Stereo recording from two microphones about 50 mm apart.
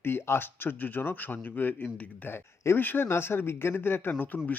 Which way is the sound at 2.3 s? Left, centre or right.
Left.